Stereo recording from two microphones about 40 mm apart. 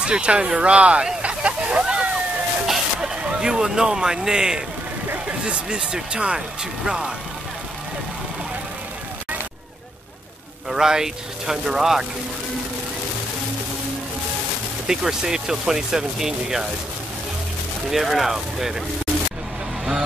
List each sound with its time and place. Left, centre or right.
0.0 s speech: right
1.2 s a sound: right
2.6 s a sound: centre
3.3 s speech: right
10.7 s speech: centre
14.9 s speech: centre
17.8 s speech: centre